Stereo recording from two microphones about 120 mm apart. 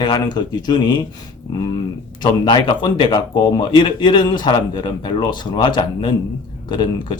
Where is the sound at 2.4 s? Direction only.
40° left (ahead or behind).